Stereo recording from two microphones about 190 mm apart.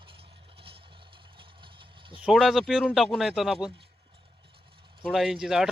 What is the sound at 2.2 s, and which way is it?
A man's voice, centre (ahead or behind).